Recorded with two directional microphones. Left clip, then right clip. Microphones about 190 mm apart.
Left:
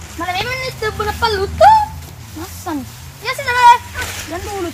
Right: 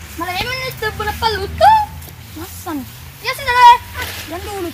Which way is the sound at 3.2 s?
10° left (ahead or behind).